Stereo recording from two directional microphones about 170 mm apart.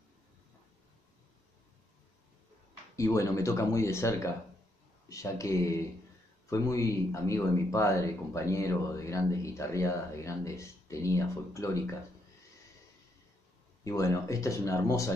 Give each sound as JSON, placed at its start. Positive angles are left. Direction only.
{"t": 3.0, "sound": "a man's voice", "side_deg": 20}
{"t": 13.8, "sound": "speech", "side_deg": 20}